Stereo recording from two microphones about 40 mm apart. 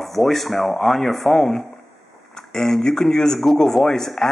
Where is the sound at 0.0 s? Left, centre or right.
Centre.